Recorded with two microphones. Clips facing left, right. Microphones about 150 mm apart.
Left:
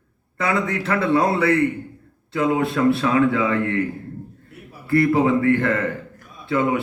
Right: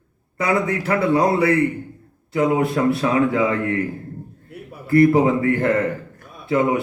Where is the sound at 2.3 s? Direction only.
20° right (ahead or behind).